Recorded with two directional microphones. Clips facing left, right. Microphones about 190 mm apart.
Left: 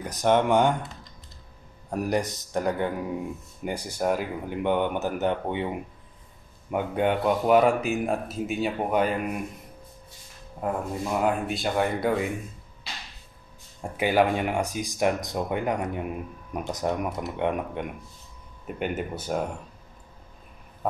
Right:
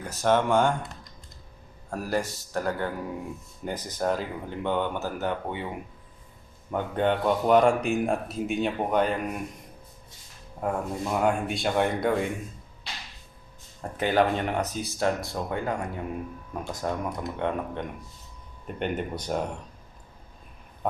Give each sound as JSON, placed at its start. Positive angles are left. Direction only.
{"t": 0.0, "sound": "speech", "side_deg": 15}
{"t": 1.9, "sound": "a man's voice", "side_deg": 20}
{"t": 6.7, "sound": "speech", "side_deg": 10}
{"t": 10.6, "sound": "speech", "side_deg": 0}
{"t": 13.7, "sound": "a man's voice", "side_deg": 10}